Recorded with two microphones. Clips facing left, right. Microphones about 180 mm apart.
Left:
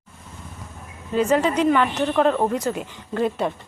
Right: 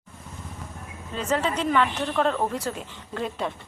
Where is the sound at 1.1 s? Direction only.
10° left (ahead or behind).